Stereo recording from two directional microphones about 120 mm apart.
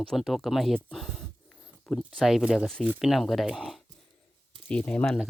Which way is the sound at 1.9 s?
Centre (ahead or behind).